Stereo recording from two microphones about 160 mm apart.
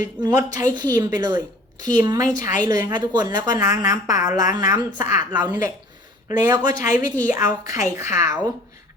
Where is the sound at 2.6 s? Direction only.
20° right (ahead or behind).